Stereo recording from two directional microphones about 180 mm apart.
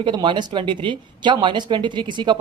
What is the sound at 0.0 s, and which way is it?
Speech, 25° right (ahead or behind).